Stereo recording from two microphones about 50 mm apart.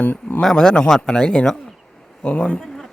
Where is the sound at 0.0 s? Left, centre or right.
Left.